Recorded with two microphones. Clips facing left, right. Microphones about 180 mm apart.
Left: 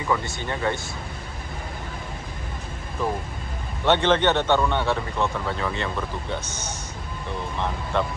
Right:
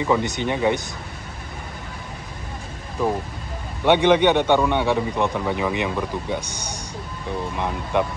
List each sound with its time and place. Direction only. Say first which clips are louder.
0.1 s a man's voice: right 4 dB; 20° right (ahead or behind)
3.8 s a man's voice: right 4 dB; 10° right (ahead or behind)